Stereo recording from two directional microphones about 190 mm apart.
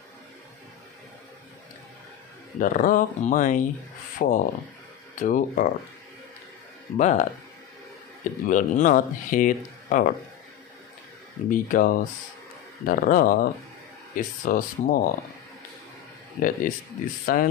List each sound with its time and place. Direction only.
2.6 s speech: 45° left (ahead or behind)
7.0 s speech: 40° left (ahead or behind)
11.4 s speech: 45° left (ahead or behind)
16.3 s speech: 45° left (ahead or behind)